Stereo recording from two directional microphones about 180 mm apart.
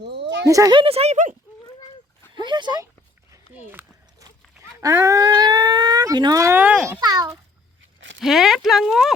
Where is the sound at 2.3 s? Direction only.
25° right (ahead or behind).